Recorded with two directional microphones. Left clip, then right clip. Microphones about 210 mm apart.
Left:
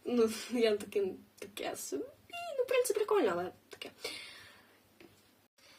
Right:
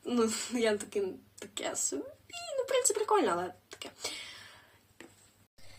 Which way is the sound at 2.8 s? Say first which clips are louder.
Even; 10° left (ahead or behind).